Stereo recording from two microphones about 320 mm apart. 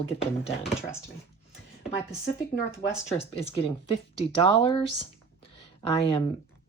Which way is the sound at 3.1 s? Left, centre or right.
Centre.